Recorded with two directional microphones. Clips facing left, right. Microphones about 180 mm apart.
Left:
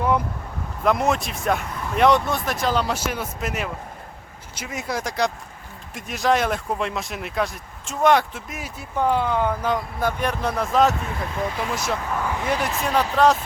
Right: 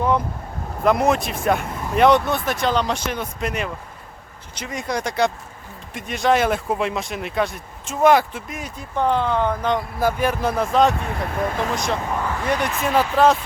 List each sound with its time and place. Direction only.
0.9 s speech: centre (ahead or behind)
10.0 s speech: 5° right (ahead or behind)
11.3 s speech: 50° right (ahead or behind)
11.7 s speech: 5° left (ahead or behind)